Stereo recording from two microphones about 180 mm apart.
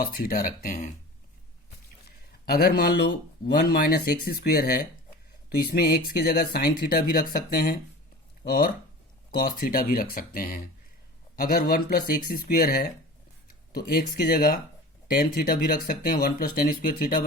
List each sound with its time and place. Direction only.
0.0 s speech: 55° left (ahead or behind)
2.5 s speech: 60° left (ahead or behind)